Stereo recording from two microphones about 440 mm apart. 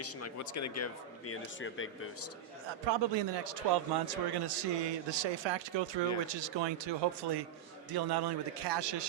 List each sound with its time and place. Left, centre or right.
0.0 s speech: left
2.8 s a man's voice: right